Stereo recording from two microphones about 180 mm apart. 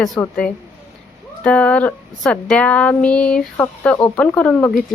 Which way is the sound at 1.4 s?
5° left (ahead or behind).